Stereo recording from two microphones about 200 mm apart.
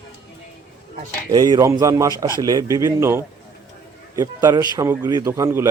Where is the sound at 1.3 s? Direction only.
20° right (ahead or behind).